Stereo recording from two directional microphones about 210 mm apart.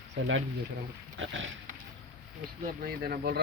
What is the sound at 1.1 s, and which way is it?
Speech, 60° right (ahead or behind).